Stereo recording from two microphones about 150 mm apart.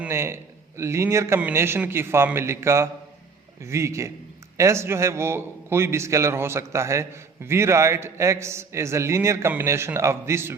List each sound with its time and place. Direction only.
0.0 s a man's voice: 15° right (ahead or behind)